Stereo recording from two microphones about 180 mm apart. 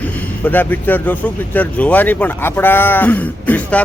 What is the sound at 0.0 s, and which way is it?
Speech, 10° left (ahead or behind).